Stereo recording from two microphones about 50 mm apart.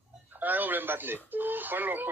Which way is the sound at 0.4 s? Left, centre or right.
Right.